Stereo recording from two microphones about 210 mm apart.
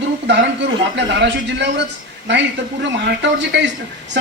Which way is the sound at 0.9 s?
55° right (ahead or behind).